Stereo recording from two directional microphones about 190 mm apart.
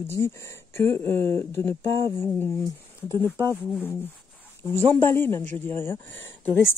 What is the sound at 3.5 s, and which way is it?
Speech, 10° left (ahead or behind).